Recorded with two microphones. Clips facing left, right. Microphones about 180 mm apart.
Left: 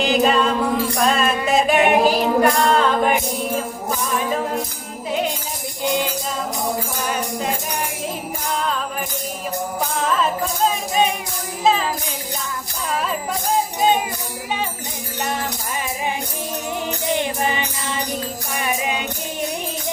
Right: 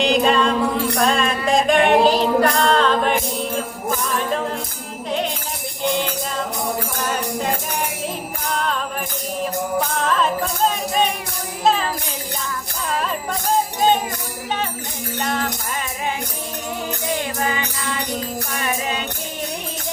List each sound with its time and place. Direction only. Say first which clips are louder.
0.0 s music: even; 5° left (ahead or behind)
4.2 s music: even; 5° left (ahead or behind)
7.1 s music: right 1 dB; centre (ahead or behind)
10.1 s music: even; 5° left (ahead or behind)
15.2 s music: right 1 dB; 15° left (ahead or behind)
17.2 s music: left 1 dB; 25° left (ahead or behind)